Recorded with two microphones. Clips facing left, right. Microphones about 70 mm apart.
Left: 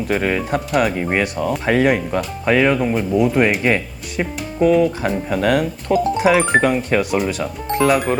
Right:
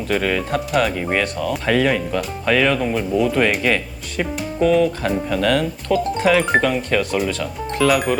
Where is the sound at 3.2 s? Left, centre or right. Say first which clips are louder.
Left 2 dB; centre.